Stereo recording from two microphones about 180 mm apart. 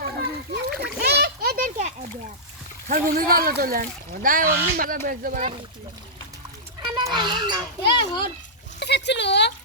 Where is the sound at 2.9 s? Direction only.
50° right (ahead or behind).